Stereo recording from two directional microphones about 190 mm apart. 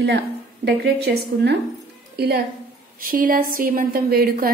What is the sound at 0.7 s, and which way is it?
A woman's voice, 60° right (ahead or behind).